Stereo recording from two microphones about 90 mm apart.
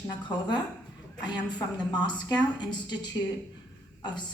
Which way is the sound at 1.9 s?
50° left (ahead or behind).